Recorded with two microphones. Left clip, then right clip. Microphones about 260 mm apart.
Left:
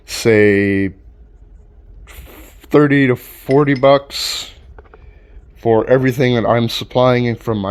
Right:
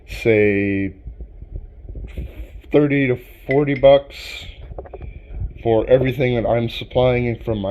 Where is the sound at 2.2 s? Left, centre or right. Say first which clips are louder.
Left 3 dB; left.